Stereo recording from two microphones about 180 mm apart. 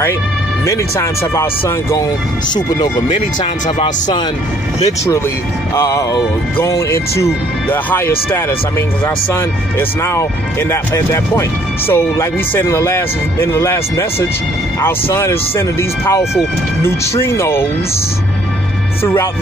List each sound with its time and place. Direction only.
0.7 s speech: 15° left (ahead or behind)
5.8 s speech: 20° left (ahead or behind)
16.8 s speech: 15° left (ahead or behind)